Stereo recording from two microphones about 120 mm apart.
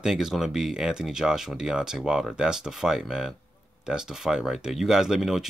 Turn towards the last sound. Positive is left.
turn(degrees=-5)  # may be behind; listen again after turning